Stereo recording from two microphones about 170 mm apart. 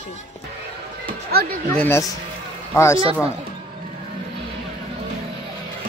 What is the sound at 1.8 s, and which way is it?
Speech, 15° left (ahead or behind).